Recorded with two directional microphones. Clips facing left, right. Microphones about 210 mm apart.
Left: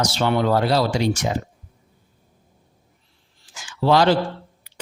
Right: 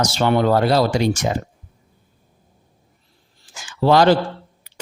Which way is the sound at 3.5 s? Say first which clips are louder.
Right 3 dB; 45° right (ahead or behind).